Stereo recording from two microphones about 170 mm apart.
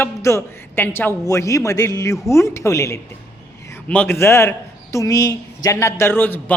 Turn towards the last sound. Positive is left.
turn(degrees=10)  # may be behind; listen again after turning